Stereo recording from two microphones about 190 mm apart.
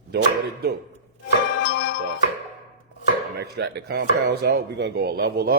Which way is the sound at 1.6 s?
60° left (ahead or behind).